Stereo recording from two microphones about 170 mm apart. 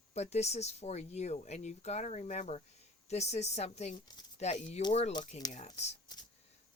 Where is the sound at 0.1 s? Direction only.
40° left (ahead or behind).